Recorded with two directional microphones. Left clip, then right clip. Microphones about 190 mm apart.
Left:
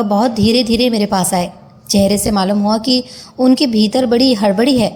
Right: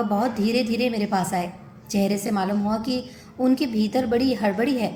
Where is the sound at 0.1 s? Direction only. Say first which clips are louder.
Left 9 dB; 35° left (ahead or behind).